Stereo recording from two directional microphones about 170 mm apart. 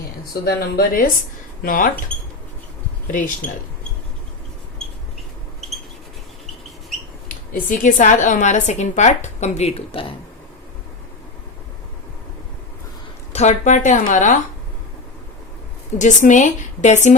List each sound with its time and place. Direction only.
0.4 s speech: 65° left (ahead or behind)
3.1 s a woman's voice: 50° left (ahead or behind)
7.5 s a woman's voice: 50° left (ahead or behind); by 10.2 s 30° left (ahead or behind)
13.3 s a woman's voice: 40° left (ahead or behind)
16.0 s a woman's voice: 45° left (ahead or behind)